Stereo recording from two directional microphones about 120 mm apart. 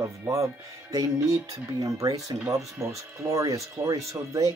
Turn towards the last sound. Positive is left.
turn(degrees=-30)  # may be behind; listen again after turning